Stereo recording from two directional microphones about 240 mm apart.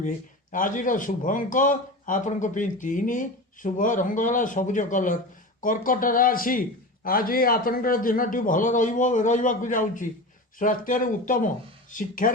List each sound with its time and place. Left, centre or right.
0.5 s a man's voice: left